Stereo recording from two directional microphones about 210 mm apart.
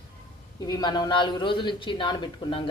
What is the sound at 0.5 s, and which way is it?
A man's voice, 20° left (ahead or behind).